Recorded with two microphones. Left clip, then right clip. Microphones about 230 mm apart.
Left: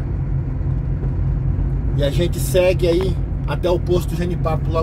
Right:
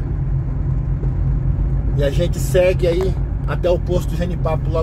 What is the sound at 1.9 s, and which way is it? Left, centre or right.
Speech, centre.